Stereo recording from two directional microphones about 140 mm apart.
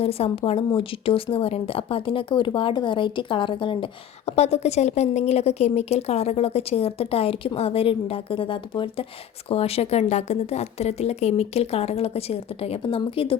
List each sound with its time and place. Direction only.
0.0 s speech: 45° left (ahead or behind)
4.3 s a woman's voice: 50° left (ahead or behind)